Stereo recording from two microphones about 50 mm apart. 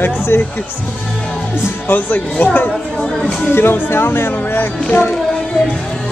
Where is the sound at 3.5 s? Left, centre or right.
Left.